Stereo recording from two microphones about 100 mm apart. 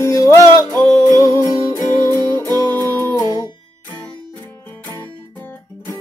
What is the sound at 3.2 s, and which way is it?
Music, 40° left (ahead or behind).